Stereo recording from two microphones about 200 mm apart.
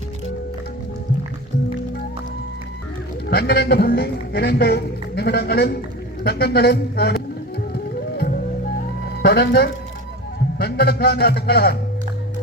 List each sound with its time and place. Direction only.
3.2 s a man's voice: 55° left (ahead or behind)
9.2 s a man's voice: 55° left (ahead or behind)